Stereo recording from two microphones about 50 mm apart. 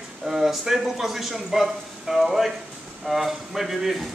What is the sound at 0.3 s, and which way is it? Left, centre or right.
A man's voice, centre.